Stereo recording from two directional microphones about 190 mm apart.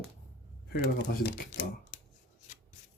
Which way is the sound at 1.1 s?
50° left (ahead or behind).